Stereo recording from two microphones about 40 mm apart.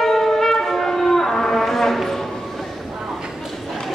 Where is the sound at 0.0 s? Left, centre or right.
Centre.